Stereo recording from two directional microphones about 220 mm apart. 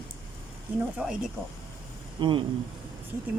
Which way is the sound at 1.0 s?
5° right (ahead or behind).